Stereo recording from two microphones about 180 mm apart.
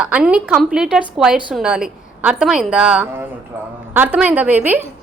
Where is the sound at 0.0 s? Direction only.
5° right (ahead or behind).